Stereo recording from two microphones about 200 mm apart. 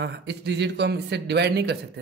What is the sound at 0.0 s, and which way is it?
A man's voice, 60° right (ahead or behind).